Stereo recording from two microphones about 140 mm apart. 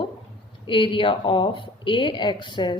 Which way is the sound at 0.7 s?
35° left (ahead or behind).